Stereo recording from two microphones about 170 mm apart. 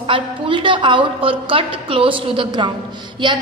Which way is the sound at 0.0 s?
30° right (ahead or behind).